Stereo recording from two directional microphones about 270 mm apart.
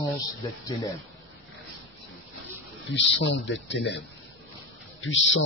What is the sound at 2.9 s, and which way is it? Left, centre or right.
Speech, left.